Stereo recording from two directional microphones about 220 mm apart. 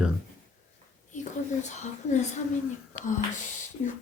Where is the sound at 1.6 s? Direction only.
30° left (ahead or behind).